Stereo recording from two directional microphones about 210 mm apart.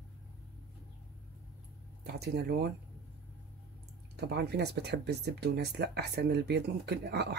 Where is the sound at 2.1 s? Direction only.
50° right (ahead or behind).